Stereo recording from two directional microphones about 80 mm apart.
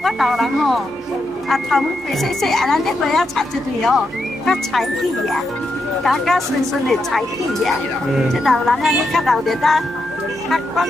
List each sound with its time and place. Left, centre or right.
0.0 s speech: centre